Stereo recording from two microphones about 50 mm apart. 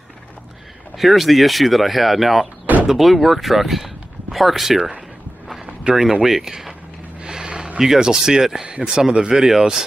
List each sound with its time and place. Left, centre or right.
0.9 s speech: centre
2.6 s door: right
2.9 s speech: centre
5.9 s speech: right
6.2 s speech: centre
7.2 s a sound: centre
7.8 s speech: centre